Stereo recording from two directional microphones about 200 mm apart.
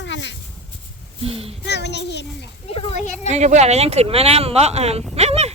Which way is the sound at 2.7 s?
30° left (ahead or behind).